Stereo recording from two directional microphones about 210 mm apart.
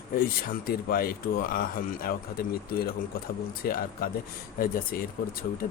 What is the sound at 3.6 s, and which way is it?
Speech, 45° left (ahead or behind).